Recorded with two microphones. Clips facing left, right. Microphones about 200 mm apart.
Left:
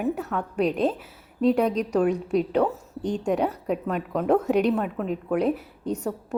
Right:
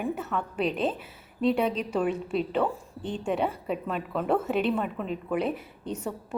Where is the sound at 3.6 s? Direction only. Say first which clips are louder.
Left 4 dB; 5° left (ahead or behind).